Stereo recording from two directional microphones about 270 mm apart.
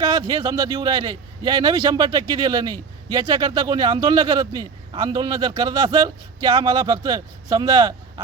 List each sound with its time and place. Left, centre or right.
0.0 s a man's voice: centre